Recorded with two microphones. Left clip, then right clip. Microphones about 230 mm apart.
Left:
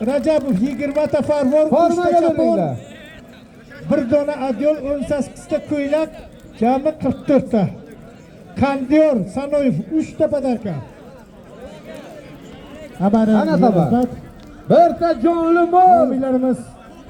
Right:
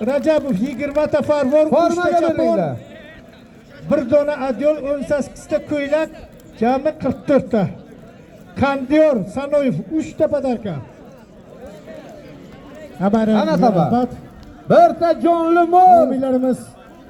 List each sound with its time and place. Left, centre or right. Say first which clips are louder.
0.0 s speech: even; centre
3.8 s speech: right 1 dB; centre
13.0 s a man's voice: even; centre
14.7 s a man's voice: right 1 dB; right